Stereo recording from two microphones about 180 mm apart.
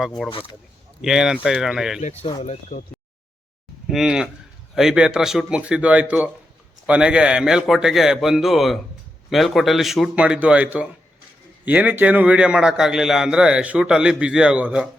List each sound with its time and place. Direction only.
0.3 s speech: 30° left (ahead or behind)
1.0 s a man's voice: 5° right (ahead or behind)
2.2 s speech: 30° left (ahead or behind)
3.8 s a man's voice: 5° right (ahead or behind)